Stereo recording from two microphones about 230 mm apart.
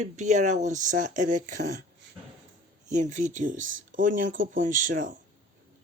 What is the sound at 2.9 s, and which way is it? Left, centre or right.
Speech, right.